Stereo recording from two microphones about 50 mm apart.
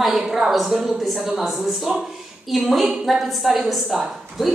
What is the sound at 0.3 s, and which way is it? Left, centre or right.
A woman's voice, centre.